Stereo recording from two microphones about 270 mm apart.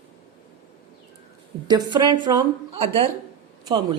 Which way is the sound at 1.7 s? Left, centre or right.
Centre.